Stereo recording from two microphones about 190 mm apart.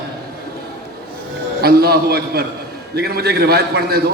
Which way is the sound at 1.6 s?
55° right (ahead or behind).